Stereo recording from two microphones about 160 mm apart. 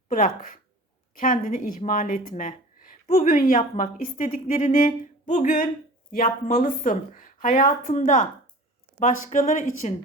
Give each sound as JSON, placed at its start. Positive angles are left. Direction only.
{"t": 0.1, "sound": "speech", "side_deg": 60}